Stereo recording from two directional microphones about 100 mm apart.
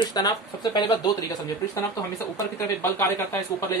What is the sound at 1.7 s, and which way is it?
Speech, 30° left (ahead or behind).